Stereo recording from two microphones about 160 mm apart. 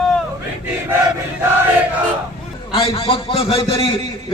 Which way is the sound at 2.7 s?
35° left (ahead or behind).